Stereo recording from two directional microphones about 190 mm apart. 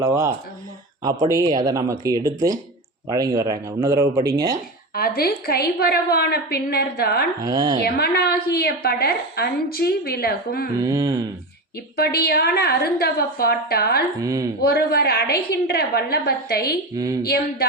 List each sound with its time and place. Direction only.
0.0 s speech: 15° right (ahead or behind)
4.9 s a woman's voice: 55° left (ahead or behind)
7.4 s mantra: 20° right (ahead or behind)
7.8 s a woman's voice: 55° left (ahead or behind)
10.8 s mantra: 20° right (ahead or behind)
11.9 s a woman's voice: 55° left (ahead or behind)
14.2 s speech: 15° right (ahead or behind)
14.6 s a woman's voice: 55° left (ahead or behind)